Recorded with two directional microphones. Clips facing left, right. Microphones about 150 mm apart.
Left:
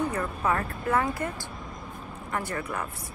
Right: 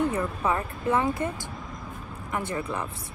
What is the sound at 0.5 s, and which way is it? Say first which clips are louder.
Speech: even; 20° right (ahead or behind).